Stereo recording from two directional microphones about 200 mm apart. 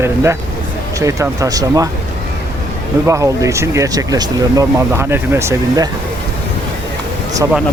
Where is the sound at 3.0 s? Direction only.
15° right (ahead or behind).